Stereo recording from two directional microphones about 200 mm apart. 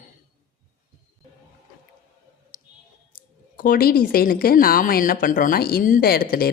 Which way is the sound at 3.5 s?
45° left (ahead or behind).